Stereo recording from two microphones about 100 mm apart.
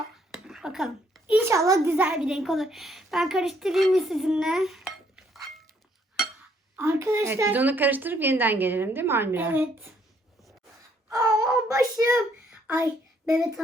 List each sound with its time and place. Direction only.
0.3 s a sound: 5° right (ahead or behind)
1.4 s a woman's voice: 30° right (ahead or behind)
1.9 s a woman's voice: 15° right (ahead or behind)
2.1 s speech: 5° right (ahead or behind)
6.7 s a woman's voice: 25° right (ahead or behind)
11.1 s a child's voice: 35° right (ahead or behind)
12.7 s child singing: 35° right (ahead or behind)